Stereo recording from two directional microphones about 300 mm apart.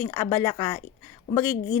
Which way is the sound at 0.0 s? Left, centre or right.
Centre.